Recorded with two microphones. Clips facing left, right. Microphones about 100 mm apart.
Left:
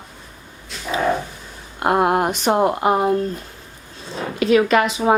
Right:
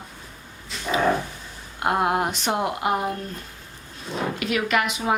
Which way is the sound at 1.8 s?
60° left (ahead or behind).